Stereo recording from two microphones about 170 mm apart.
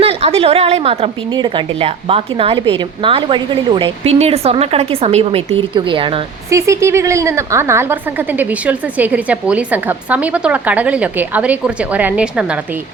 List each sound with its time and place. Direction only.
0.0 s a woman's voice: 35° right (ahead or behind)
6.5 s a woman's voice: 15° right (ahead or behind)